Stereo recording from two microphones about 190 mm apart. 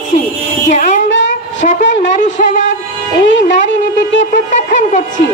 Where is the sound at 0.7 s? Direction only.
40° left (ahead or behind).